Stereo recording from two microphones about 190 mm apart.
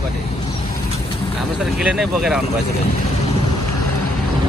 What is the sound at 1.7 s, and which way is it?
Speech, 5° right (ahead or behind).